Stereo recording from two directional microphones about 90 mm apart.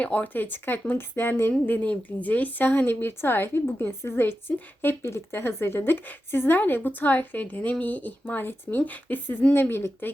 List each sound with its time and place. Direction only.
0.0 s speech: 15° left (ahead or behind)